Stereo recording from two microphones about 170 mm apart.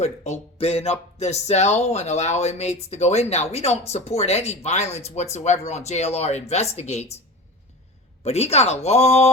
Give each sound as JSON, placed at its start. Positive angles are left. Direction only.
{"t": 0.0, "sound": "speech", "side_deg": 40}
{"t": 8.2, "sound": "speech", "side_deg": 40}